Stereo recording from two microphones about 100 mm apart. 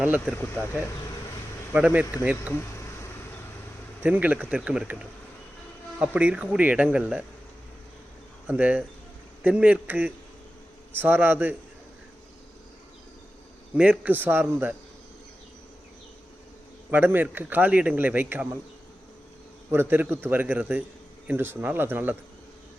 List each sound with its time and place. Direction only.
1.7 s speech: 15° right (ahead or behind)
4.0 s speech: 15° right (ahead or behind)
6.0 s speech: 10° right (ahead or behind)
8.4 s a man's voice: 15° right (ahead or behind)
13.7 s a man's voice: 10° right (ahead or behind)
16.9 s a man's voice: 20° right (ahead or behind)
19.7 s a man's voice: 20° right (ahead or behind)